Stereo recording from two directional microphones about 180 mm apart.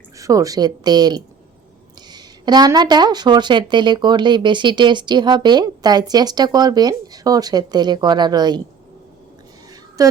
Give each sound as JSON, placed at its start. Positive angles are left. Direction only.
{"t": 0.2, "sound": "speech", "side_deg": -20}
{"t": 10.0, "sound": "speech", "side_deg": -20}